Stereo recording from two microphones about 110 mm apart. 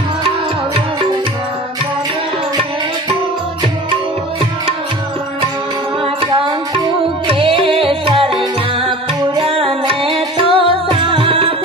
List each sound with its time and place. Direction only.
6.0 s music: 50° right (ahead or behind)